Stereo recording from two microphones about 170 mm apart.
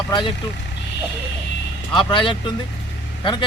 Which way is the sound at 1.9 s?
30° left (ahead or behind).